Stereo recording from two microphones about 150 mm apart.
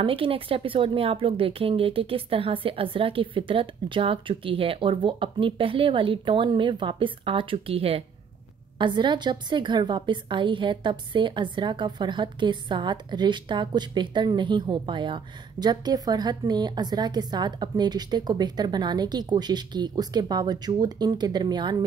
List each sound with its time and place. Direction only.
0.0 s a woman's voice: 35° right (ahead or behind)